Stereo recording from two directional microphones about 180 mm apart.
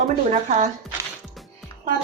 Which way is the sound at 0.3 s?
40° right (ahead or behind).